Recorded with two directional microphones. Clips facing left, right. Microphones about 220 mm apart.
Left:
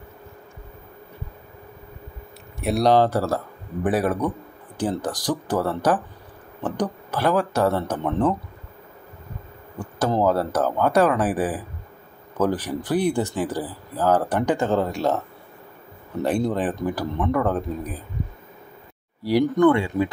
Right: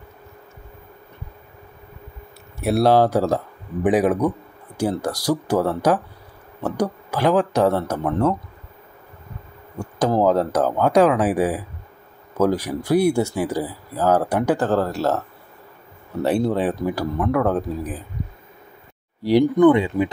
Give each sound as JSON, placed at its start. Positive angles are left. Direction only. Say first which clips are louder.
{"t": 2.6, "sound": "speech", "louder": "right 2 dB", "side_deg": -5}
{"t": 9.8, "sound": "speech", "louder": "right 3 dB", "side_deg": -10}
{"t": 19.6, "sound": "speech", "louder": "right 2 dB", "side_deg": -20}